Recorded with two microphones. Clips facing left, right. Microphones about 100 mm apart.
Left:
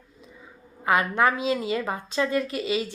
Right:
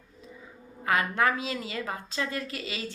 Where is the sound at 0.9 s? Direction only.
25° left (ahead or behind).